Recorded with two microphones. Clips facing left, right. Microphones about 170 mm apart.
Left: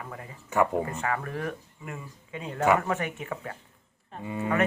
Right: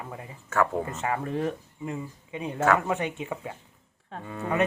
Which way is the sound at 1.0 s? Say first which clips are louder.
Right 3 dB; 20° right (ahead or behind).